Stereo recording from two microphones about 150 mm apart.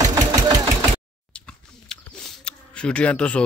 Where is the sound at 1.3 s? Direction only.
5° left (ahead or behind).